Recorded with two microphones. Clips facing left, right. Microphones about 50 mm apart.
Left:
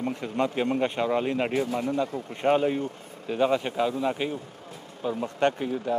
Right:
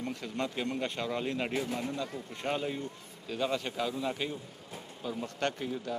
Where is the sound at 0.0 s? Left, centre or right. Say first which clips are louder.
Left 8 dB; left.